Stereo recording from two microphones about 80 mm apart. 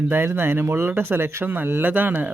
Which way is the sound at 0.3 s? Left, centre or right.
Right.